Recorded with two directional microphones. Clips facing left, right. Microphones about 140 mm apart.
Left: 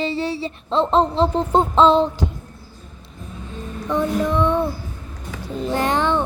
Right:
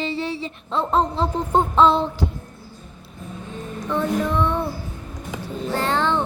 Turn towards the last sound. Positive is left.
turn(degrees=15)  # may be behind; listen again after turning